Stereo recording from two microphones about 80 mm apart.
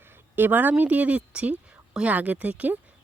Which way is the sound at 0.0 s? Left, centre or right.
Right.